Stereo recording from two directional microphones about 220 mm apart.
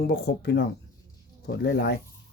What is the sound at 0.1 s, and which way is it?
Speech, 45° left (ahead or behind).